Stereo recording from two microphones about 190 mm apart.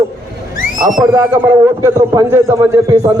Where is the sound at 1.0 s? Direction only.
15° right (ahead or behind).